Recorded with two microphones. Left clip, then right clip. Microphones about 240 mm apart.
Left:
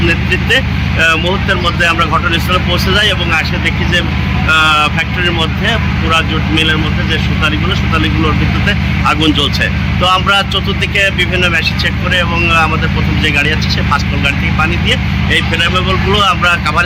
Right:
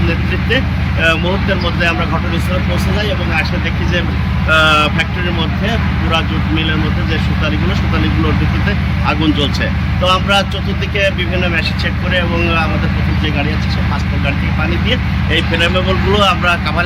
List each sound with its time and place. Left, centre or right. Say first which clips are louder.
1.0 s speech: left 2 dB; centre
4.4 s speech: left 1 dB; centre
9.0 s speech: left 4 dB; centre
14.8 s speech: left 4 dB; centre